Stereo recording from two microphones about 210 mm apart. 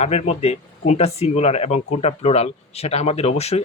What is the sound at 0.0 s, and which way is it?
Speech, 30° left (ahead or behind).